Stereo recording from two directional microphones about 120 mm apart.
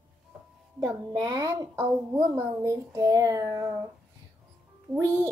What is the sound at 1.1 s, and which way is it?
A child's voice, 35° right (ahead or behind).